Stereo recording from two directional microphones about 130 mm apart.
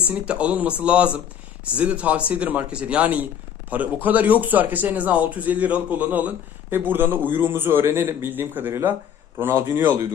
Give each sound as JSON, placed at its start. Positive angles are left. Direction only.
{"t": 0.1, "sound": "speech", "side_deg": -10}